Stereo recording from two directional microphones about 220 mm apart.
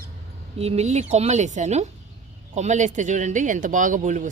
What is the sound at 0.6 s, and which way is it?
Speech, 30° right (ahead or behind).